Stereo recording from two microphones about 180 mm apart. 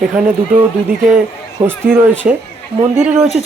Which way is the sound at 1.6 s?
25° right (ahead or behind).